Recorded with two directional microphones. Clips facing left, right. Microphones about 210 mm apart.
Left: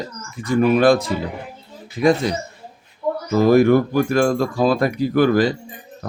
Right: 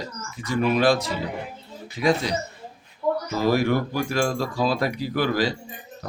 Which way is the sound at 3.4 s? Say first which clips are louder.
Left 9 dB; 50° left (ahead or behind).